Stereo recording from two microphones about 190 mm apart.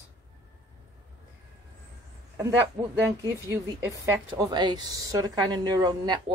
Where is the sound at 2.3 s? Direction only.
15° right (ahead or behind).